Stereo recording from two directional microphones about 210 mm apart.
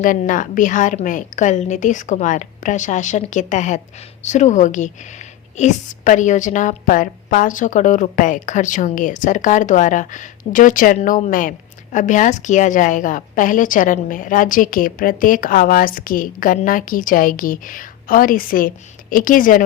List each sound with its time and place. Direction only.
0.0 s a woman's voice: 40° left (ahead or behind)